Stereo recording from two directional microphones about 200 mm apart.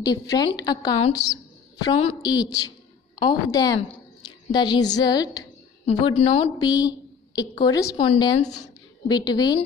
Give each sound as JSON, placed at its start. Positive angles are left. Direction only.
{"t": 0.0, "sound": "a woman's voice", "side_deg": 20}
{"t": 2.0, "sound": "a woman's voice", "side_deg": 30}
{"t": 2.4, "sound": "a woman's voice", "side_deg": 20}
{"t": 8.1, "sound": "speech", "side_deg": 30}
{"t": 9.0, "sound": "a woman's voice", "side_deg": 20}